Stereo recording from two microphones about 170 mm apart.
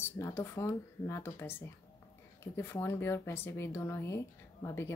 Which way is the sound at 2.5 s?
15° left (ahead or behind).